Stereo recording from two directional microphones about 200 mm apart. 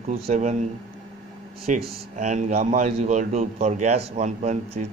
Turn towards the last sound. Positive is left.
turn(degrees=-35)  # may be behind; listen again after turning